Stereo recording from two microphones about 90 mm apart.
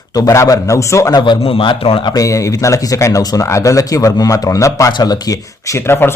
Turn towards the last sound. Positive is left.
turn(degrees=25)  # may be behind; listen again after turning